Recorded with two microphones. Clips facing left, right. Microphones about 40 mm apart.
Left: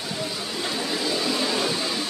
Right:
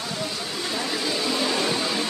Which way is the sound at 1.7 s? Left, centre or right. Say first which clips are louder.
Right 2 dB; centre.